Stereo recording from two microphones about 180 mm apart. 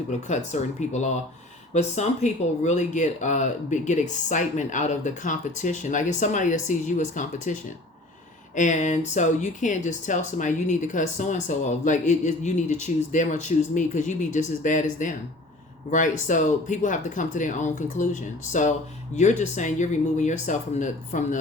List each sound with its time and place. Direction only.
0.3 s speech: 40° left (ahead or behind)